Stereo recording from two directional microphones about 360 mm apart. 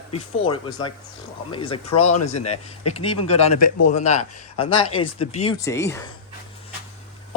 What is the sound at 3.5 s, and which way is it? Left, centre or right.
Speech, left.